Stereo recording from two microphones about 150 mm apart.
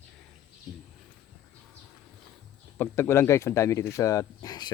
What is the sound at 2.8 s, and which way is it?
Speech, 15° left (ahead or behind).